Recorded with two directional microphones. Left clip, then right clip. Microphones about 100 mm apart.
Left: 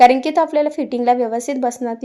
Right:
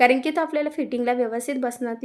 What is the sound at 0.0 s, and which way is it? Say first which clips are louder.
A woman's voice: left 7 dB; 25° left (ahead or behind).